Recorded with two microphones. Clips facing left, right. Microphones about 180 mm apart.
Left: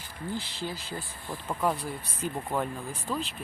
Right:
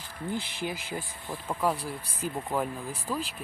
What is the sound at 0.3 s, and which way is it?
Speech, 20° right (ahead or behind).